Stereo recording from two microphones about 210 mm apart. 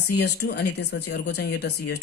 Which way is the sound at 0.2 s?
50° left (ahead or behind).